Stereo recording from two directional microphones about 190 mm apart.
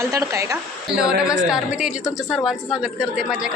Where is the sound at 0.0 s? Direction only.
15° right (ahead or behind).